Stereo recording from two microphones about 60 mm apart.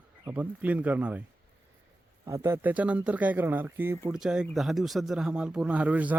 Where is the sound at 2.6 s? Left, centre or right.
Right.